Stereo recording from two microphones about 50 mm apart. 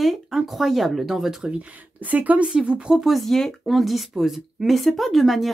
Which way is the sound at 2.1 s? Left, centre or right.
Right.